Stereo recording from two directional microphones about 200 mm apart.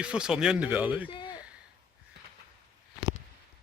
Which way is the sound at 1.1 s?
25° left (ahead or behind).